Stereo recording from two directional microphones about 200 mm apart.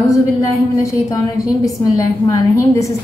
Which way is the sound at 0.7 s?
15° left (ahead or behind).